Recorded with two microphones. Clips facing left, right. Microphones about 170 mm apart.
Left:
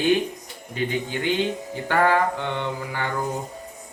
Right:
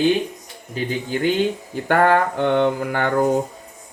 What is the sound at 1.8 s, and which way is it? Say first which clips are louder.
Mantra: right 4 dB; 55° right (ahead or behind).